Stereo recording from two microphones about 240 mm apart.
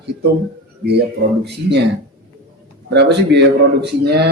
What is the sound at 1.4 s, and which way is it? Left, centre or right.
Speech, right.